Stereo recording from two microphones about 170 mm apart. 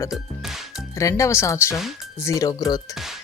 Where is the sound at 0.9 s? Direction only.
20° left (ahead or behind).